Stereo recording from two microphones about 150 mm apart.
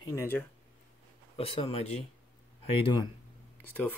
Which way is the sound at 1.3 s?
40° left (ahead or behind).